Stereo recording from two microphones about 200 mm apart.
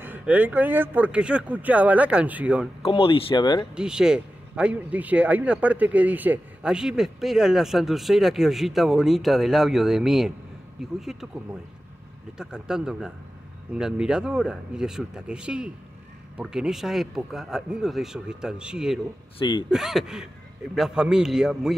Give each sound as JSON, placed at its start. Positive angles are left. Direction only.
{"t": 0.0, "sound": "speech", "side_deg": -10}
{"t": 2.8, "sound": "speech", "side_deg": 30}
{"t": 3.7, "sound": "a man's voice", "side_deg": -5}
{"t": 12.4, "sound": "a man's voice", "side_deg": -5}
{"t": 19.3, "sound": "speech", "side_deg": 25}
{"t": 19.7, "sound": "a man's voice", "side_deg": 0}